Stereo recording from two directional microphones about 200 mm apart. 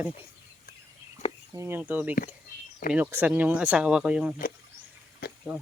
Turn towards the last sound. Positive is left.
turn(degrees=55)  # may be behind; listen again after turning